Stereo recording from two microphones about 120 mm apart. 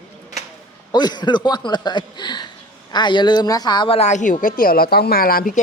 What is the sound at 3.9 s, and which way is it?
Speech, 70° left (ahead or behind).